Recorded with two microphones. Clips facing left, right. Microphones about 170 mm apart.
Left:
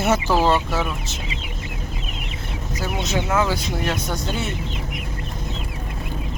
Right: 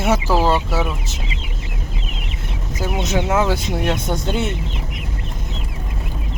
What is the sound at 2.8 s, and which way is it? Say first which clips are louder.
Speech: right 4 dB; 20° right (ahead or behind).